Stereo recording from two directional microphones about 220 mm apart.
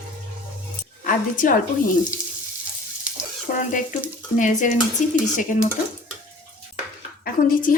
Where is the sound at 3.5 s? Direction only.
40° left (ahead or behind).